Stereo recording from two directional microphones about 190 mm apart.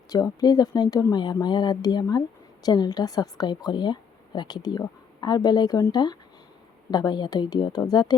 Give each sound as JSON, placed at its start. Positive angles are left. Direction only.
{"t": 0.1, "sound": "a woman's voice", "side_deg": 20}